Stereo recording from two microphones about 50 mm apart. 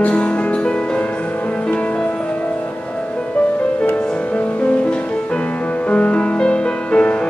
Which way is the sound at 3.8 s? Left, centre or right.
Left.